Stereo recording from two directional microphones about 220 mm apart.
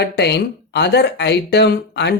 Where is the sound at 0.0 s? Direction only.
50° left (ahead or behind).